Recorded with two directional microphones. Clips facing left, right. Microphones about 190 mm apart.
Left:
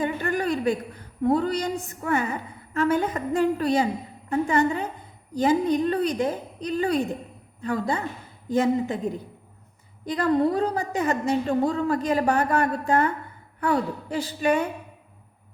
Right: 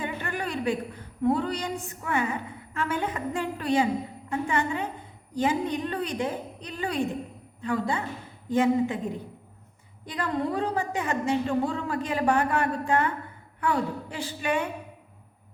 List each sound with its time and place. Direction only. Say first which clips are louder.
0.0 s a woman's voice: left 6 dB; 40° left (ahead or behind)
10.1 s a woman's voice: left 7 dB; 40° left (ahead or behind)